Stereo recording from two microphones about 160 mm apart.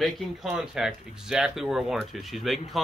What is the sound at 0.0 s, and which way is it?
Speech, centre (ahead or behind).